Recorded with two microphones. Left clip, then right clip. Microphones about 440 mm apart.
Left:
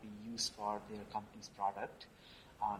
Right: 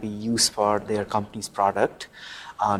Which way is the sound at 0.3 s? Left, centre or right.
Right.